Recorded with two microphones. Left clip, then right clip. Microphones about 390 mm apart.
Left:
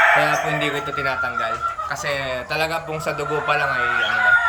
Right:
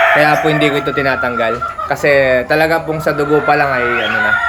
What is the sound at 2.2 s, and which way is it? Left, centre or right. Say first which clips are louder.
Speech: right 12 dB; centre.